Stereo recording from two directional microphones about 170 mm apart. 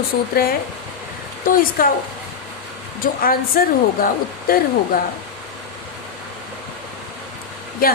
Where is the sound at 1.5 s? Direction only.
55° left (ahead or behind).